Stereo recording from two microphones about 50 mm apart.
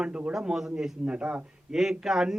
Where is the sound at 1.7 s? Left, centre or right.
Centre.